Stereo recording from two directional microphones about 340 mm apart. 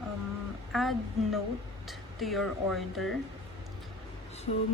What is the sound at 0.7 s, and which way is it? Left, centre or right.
Speech, centre.